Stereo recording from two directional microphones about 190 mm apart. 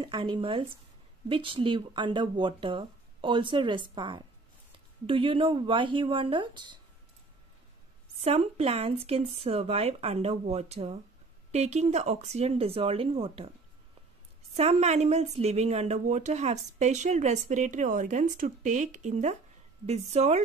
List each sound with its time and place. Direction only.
0.0 s speech: 25° right (ahead or behind)
8.2 s speech: 35° right (ahead or behind)
14.5 s speech: 35° right (ahead or behind)